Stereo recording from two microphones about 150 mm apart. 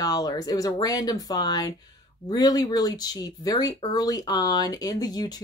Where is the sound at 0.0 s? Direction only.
25° left (ahead or behind).